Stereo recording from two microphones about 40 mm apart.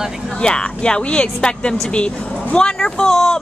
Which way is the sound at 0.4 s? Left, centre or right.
Left.